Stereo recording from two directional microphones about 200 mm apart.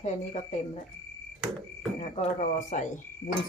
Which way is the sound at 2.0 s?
35° left (ahead or behind).